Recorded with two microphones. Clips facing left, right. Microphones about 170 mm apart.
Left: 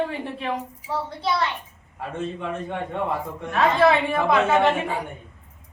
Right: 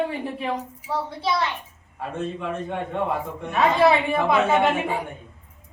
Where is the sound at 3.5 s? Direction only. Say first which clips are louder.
Even; 10° right (ahead or behind).